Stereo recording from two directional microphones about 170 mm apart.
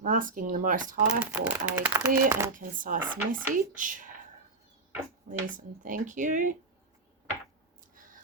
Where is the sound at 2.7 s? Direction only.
55° right (ahead or behind).